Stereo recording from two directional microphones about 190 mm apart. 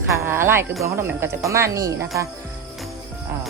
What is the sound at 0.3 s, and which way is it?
Speech, 10° right (ahead or behind).